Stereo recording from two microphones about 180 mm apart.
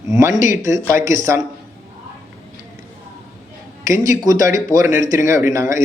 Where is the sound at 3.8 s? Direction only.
20° right (ahead or behind).